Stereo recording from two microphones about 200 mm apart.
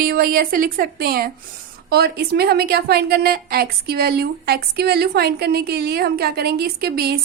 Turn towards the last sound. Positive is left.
turn(degrees=-50)  # may be behind; listen again after turning